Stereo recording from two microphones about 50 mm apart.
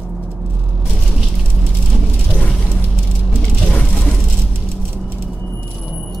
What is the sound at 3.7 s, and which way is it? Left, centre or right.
Vehicle, left.